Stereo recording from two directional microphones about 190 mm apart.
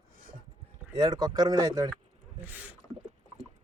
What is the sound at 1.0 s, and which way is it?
Speech, 20° right (ahead or behind).